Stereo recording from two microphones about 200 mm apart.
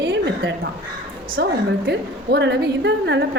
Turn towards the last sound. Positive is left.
turn(degrees=-60)  # may be behind; listen again after turning